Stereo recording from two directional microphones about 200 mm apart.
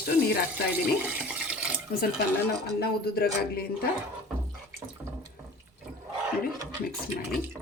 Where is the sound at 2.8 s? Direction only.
50° left (ahead or behind).